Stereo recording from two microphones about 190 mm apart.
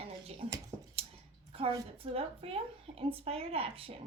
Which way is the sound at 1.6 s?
30° right (ahead or behind).